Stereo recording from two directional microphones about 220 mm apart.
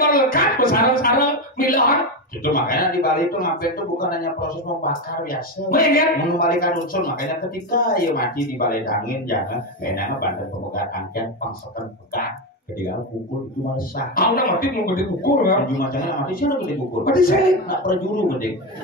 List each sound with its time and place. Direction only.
0.0 s a sound: 40° left (ahead or behind)
2.4 s a man's voice: 40° left (ahead or behind)
13.7 s a man's voice: 40° left (ahead or behind)